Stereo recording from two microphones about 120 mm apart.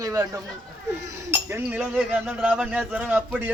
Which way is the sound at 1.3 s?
20° right (ahead or behind).